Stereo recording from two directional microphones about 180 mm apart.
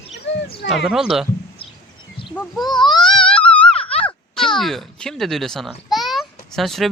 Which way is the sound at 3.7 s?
30° left (ahead or behind).